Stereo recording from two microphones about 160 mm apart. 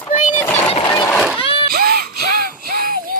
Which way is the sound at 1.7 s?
70° right (ahead or behind).